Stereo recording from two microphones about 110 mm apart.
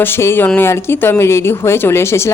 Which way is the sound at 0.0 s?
20° left (ahead or behind).